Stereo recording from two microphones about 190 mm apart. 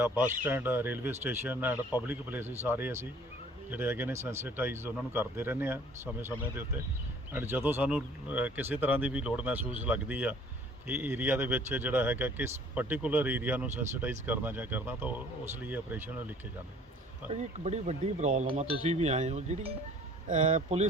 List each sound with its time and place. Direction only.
0.0 s speech: 10° right (ahead or behind)
7.3 s speech: 10° right (ahead or behind)
17.2 s speech: 35° right (ahead or behind)